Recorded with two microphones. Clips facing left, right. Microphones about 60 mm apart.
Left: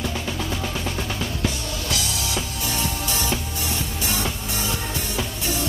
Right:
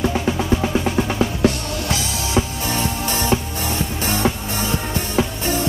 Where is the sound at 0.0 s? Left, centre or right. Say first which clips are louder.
Right 7 dB; right.